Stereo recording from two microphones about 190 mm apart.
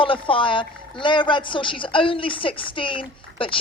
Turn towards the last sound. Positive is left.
turn(degrees=25)  # may be behind; listen again after turning